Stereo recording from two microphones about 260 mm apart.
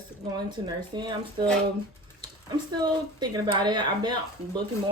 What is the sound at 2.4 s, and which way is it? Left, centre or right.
Speech, centre.